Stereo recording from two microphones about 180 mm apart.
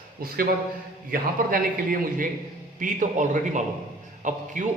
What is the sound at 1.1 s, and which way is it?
A man's voice, 50° right (ahead or behind).